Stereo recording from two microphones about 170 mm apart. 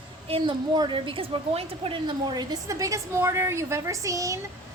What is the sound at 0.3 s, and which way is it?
A woman's voice, 30° right (ahead or behind).